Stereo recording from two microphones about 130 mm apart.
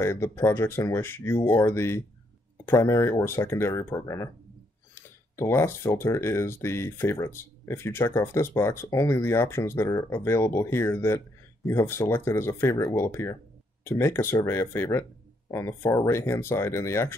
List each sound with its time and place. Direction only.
0.0 s speech: 20° left (ahead or behind)